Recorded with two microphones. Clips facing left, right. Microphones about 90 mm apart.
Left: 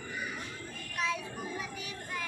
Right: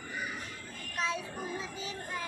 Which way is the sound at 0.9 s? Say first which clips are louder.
Even; 25° right (ahead or behind).